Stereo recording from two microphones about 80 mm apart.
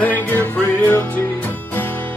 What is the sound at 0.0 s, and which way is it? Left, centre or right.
Music, left.